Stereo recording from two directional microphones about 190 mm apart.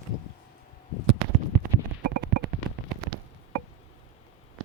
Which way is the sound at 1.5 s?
55° right (ahead or behind).